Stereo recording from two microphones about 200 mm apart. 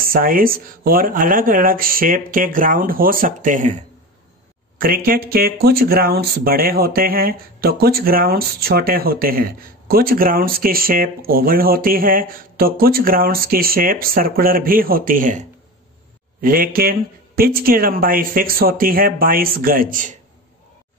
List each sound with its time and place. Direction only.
0.0 s speech: 45° right (ahead or behind)
4.7 s speech: 45° right (ahead or behind)